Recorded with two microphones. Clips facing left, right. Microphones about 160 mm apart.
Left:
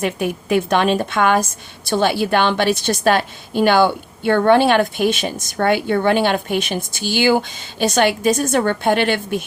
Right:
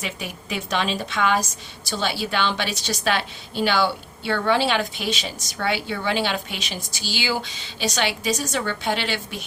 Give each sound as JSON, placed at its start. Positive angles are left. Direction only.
{"t": 0.0, "sound": "a woman's voice", "side_deg": 50}